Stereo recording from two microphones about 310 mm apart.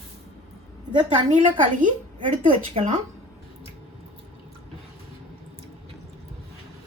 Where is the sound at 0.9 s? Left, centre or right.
Right.